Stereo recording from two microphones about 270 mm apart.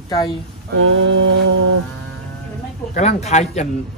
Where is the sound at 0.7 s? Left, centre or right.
Right.